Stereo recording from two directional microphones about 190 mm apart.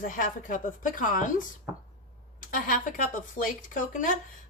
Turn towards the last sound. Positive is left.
turn(degrees=45)  # may be behind; listen again after turning